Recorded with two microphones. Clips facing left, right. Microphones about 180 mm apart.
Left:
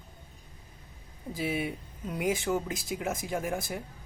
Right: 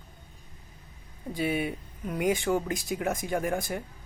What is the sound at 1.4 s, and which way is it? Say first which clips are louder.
Speech: right 3 dB; 85° right.